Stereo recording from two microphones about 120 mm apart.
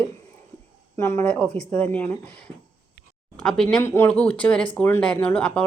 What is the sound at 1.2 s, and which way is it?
Speech, 10° left (ahead or behind).